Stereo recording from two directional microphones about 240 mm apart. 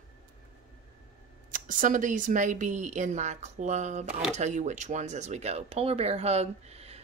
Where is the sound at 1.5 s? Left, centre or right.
Right.